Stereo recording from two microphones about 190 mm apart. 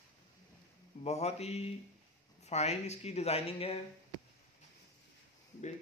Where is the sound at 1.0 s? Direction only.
35° left (ahead or behind).